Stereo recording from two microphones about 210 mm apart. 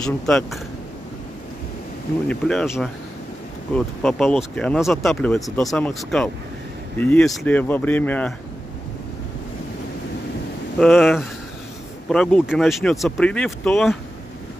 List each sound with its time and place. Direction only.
0.0 s speech: 5° left (ahead or behind)
2.2 s speech: 5° left (ahead or behind)
10.8 s speech: centre (ahead or behind)